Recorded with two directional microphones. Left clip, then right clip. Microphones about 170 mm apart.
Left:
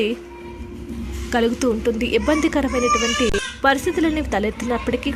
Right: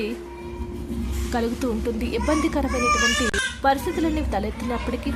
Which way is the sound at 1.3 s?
20° left (ahead or behind).